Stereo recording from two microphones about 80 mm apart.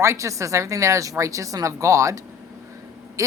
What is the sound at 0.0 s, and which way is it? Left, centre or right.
Speech, right.